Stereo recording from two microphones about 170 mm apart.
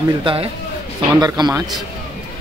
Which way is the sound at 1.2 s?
25° right (ahead or behind).